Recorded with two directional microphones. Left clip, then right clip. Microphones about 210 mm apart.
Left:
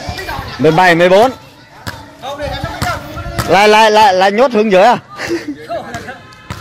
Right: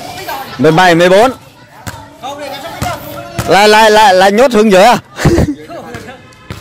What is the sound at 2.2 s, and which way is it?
Basketball bounce, 50° right (ahead or behind).